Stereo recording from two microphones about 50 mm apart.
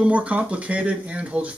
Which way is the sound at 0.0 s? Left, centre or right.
Right.